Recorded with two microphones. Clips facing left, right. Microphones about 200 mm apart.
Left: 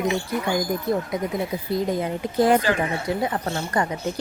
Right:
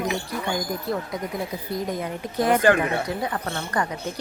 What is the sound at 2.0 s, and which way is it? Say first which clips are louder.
A woman's voice: left 4 dB; 30° left (ahead or behind).